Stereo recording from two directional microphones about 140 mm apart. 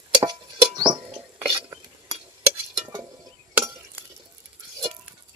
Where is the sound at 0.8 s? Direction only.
30° right (ahead or behind).